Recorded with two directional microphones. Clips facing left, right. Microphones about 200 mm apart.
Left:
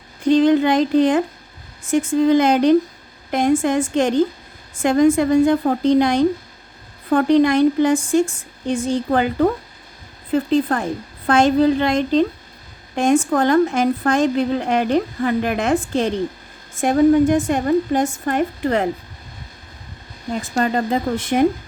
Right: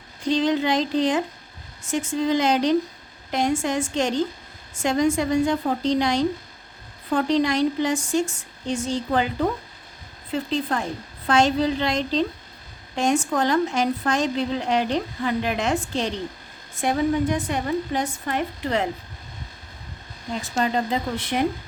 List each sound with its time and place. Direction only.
0.3 s a sound: 55° left (ahead or behind)
1.9 s a woman's voice: 55° left (ahead or behind)
20.3 s a woman's voice: 50° left (ahead or behind)